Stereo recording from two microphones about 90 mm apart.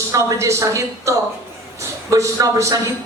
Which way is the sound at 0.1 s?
35° right (ahead or behind).